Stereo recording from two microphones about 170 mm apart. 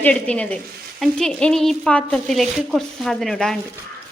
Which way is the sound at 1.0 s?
5° left (ahead or behind).